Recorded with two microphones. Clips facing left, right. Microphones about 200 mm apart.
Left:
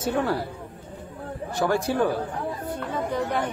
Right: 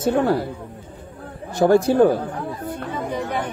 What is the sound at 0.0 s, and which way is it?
Speech, 45° right (ahead or behind).